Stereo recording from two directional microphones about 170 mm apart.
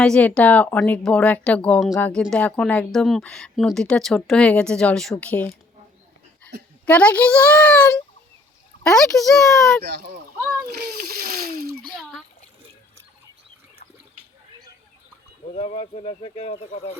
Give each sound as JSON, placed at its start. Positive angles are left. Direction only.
{"t": 0.0, "sound": "speech", "side_deg": 5}
{"t": 6.8, "sound": "speech", "side_deg": 10}
{"t": 9.8, "sound": "speech", "side_deg": -65}
{"t": 10.4, "sound": "a child's voice", "side_deg": -5}
{"t": 10.7, "sound": "speech", "side_deg": -60}
{"t": 15.5, "sound": "speech", "side_deg": 40}